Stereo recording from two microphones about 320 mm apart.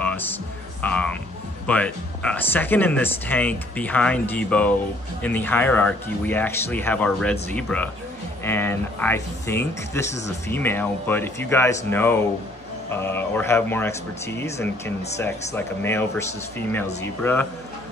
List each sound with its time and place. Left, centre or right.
0.0 s music: centre
0.8 s speech: centre